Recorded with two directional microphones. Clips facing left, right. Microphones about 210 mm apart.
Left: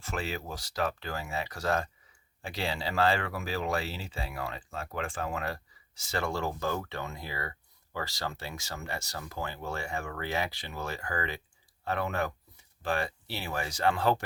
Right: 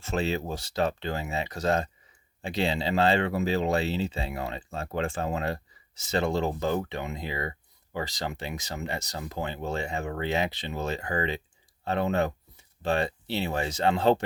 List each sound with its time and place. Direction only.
0.0 s speech: 25° right (ahead or behind)